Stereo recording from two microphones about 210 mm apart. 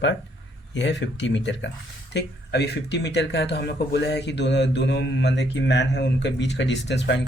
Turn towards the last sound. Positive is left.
turn(degrees=55)  # may be behind; listen again after turning